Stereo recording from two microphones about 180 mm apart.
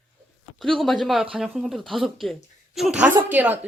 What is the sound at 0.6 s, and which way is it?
Speech, centre (ahead or behind).